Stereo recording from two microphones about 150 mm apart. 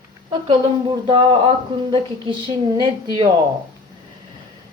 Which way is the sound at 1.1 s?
35° right (ahead or behind).